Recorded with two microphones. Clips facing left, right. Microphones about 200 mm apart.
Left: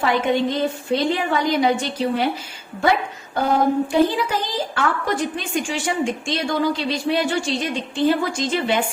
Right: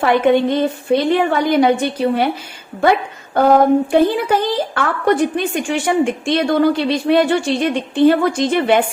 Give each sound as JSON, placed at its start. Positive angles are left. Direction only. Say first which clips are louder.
{"t": 0.0, "sound": "a woman's voice", "louder": "right 6 dB", "side_deg": -60}